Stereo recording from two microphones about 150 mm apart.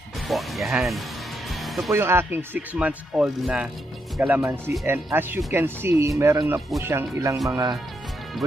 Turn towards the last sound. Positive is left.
turn(degrees=-20)  # may be behind; listen again after turning